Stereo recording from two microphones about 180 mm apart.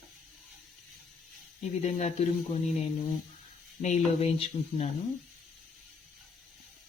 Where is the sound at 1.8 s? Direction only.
40° left (ahead or behind).